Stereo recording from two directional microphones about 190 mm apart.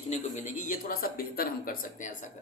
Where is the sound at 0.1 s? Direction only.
40° left (ahead or behind).